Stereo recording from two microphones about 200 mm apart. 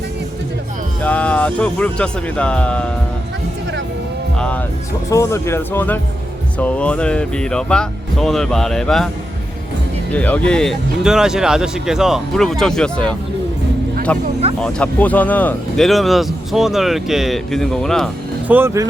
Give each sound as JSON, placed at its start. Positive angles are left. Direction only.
{"t": 1.0, "sound": "speech", "side_deg": 5}
{"t": 4.4, "sound": "speech", "side_deg": 5}
{"t": 10.1, "sound": "speech", "side_deg": 10}
{"t": 18.5, "sound": "speech", "side_deg": -15}